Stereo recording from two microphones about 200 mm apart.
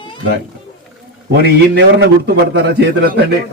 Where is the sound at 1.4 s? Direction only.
55° right (ahead or behind).